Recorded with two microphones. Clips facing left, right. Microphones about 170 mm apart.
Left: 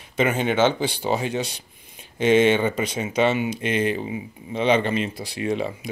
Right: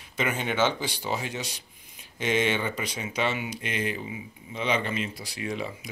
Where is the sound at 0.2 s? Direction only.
25° left (ahead or behind).